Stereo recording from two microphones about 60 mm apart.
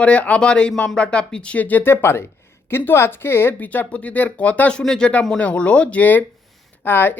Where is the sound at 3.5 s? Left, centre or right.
Left; by 5.1 s centre.